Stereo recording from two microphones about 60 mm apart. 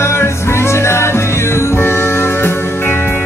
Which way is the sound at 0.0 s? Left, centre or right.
Left.